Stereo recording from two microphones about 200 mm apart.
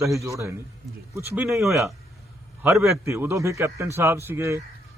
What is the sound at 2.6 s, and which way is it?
A man's voice, 15° right (ahead or behind).